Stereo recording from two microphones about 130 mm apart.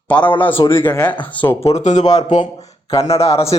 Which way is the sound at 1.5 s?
55° left (ahead or behind).